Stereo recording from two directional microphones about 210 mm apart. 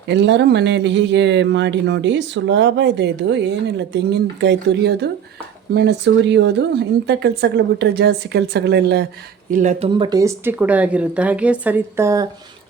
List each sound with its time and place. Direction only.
0.1 s speech: 55° right (ahead or behind)
9.5 s speech: 35° right (ahead or behind)
9.9 s speech: 20° right (ahead or behind)